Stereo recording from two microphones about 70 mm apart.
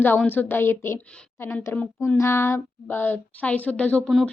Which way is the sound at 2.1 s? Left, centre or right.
Left.